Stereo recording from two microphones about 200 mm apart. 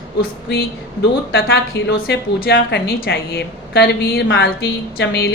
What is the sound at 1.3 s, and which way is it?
A woman's voice, 60° left (ahead or behind).